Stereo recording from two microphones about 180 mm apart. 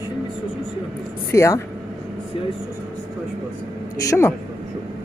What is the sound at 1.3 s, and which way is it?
Speech, 15° left (ahead or behind).